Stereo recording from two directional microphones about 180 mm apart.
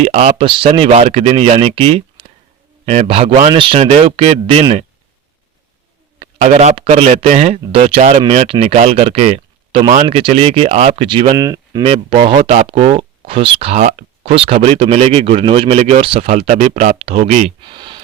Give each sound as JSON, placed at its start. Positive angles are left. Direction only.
{"t": 0.0, "sound": "speech", "side_deg": -40}
{"t": 6.1, "sound": "speech", "side_deg": -40}
{"t": 11.9, "sound": "speech", "side_deg": -35}
{"t": 17.6, "sound": "a sound", "side_deg": -25}